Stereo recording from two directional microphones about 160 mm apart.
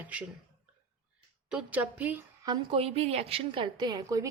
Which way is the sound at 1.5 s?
10° right (ahead or behind).